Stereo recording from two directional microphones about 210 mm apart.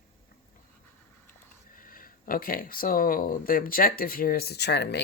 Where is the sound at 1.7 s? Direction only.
40° left (ahead or behind).